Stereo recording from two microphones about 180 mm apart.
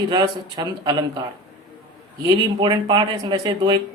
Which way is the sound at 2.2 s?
25° right (ahead or behind).